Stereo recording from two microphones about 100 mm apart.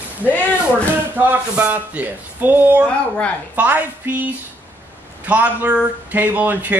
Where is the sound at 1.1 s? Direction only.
20° right (ahead or behind).